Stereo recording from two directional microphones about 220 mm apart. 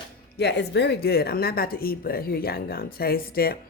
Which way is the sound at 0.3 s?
50° left (ahead or behind).